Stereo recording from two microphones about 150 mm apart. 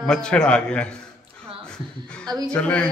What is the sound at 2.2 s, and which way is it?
Speech, 25° right (ahead or behind).